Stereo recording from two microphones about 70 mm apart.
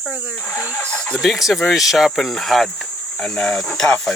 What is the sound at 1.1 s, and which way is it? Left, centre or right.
Speech, centre.